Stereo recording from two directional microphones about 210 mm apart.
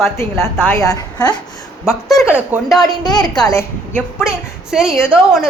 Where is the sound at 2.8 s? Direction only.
20° left (ahead or behind).